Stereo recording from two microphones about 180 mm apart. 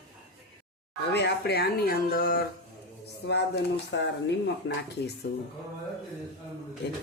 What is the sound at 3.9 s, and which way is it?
Speech, 80° left.